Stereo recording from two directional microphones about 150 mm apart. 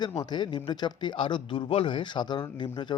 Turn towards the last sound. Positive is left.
turn(degrees=30)  # may be behind; listen again after turning